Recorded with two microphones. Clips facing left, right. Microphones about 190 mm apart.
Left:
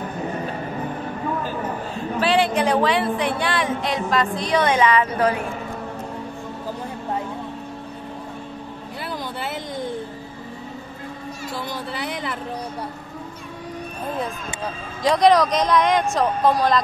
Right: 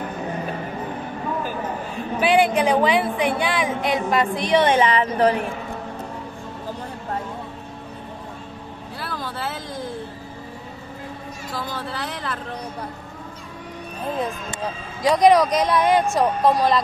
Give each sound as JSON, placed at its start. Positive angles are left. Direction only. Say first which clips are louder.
{"t": 2.1, "sound": "a woman's voice", "louder": "right 2 dB", "side_deg": -10}
{"t": 4.4, "sound": "a woman's voice", "louder": "right 4 dB", "side_deg": -20}
{"t": 9.0, "sound": "a sound", "louder": "even", "side_deg": 20}
{"t": 11.5, "sound": "speech", "louder": "right 1 dB", "side_deg": 15}
{"t": 15.0, "sound": "a woman's voice", "louder": "right 1 dB", "side_deg": -10}